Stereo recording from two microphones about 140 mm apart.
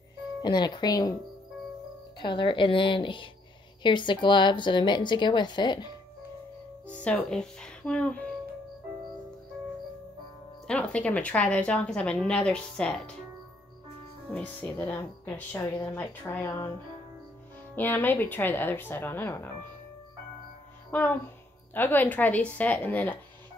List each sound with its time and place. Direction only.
0.4 s speech: 30° left (ahead or behind)
2.1 s speech: 35° left (ahead or behind)
6.9 s a woman's voice: 10° left (ahead or behind)
10.7 s a woman's voice: 10° left (ahead or behind)
14.3 s a woman's voice: 10° left (ahead or behind)
17.7 s a woman's voice: 15° left (ahead or behind)
20.9 s a woman's voice: 15° left (ahead or behind)